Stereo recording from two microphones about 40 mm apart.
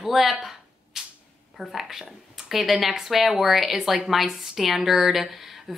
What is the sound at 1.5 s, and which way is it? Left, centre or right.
A woman's voice, centre.